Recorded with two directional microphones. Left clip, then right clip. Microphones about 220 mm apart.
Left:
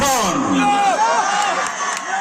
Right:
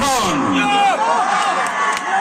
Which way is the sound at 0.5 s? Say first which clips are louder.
Right 1 dB; 5° right (ahead or behind).